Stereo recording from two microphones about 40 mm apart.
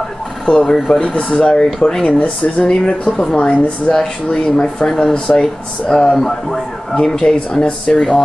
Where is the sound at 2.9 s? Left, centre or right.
Left.